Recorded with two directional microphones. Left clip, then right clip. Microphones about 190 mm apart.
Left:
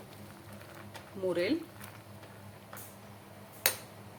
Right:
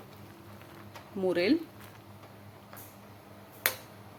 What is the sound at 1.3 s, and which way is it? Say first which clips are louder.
Speech: right 4 dB; 45° right (ahead or behind).